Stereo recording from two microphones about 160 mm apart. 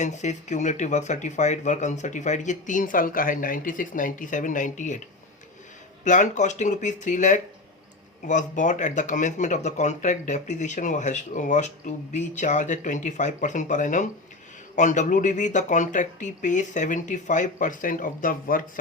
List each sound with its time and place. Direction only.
0.0 s speech: 45° left (ahead or behind)
6.1 s speech: 50° left (ahead or behind)